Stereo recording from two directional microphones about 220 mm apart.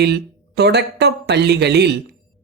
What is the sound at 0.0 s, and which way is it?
Speech, 50° right (ahead or behind).